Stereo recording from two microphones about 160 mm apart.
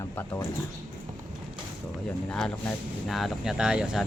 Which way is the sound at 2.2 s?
5° left (ahead or behind).